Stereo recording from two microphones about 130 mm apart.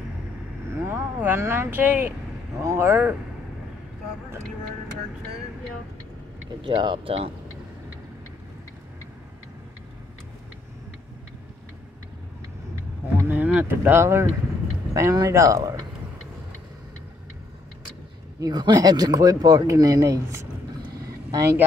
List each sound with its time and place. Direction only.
0.7 s speech: 15° right (ahead or behind)
6.6 s speech: 40° right (ahead or behind)
13.2 s speech: 15° right (ahead or behind)
18.4 s speech: 30° right (ahead or behind)